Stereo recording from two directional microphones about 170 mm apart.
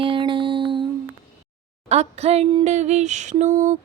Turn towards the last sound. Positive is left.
turn(degrees=-45)  # may be behind; listen again after turning